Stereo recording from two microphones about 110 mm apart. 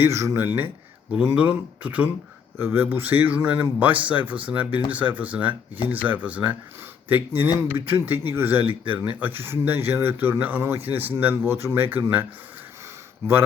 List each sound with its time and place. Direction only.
0.0 s speech: 25° right (ahead or behind)